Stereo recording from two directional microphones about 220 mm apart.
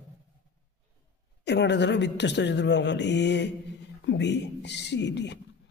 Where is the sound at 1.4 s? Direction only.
50° left (ahead or behind).